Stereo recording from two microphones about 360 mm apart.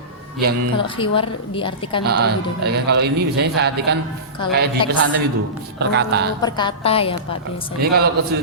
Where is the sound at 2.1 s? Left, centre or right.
Right.